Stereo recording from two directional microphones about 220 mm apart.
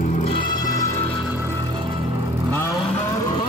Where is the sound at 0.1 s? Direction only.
25° left (ahead or behind).